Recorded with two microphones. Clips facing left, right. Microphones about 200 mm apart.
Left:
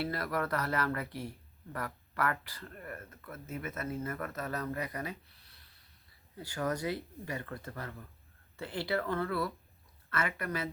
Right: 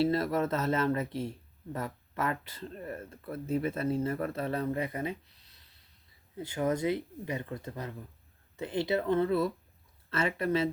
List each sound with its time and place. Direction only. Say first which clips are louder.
0.0 s speech: right 7 dB; 25° right (ahead or behind)